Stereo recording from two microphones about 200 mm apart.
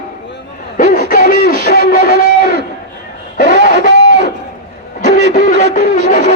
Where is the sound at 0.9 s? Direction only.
45° left (ahead or behind).